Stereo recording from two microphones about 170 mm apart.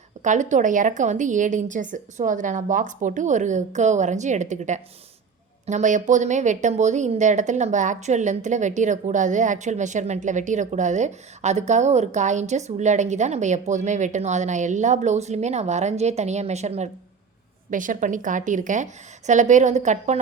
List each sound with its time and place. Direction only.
0.2 s a woman's voice: 45° right (ahead or behind)